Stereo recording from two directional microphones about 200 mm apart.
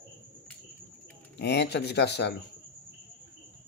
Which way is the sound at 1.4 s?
55° left (ahead or behind).